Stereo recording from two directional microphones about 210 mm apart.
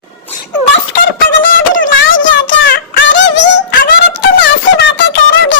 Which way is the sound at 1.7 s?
65° left (ahead or behind).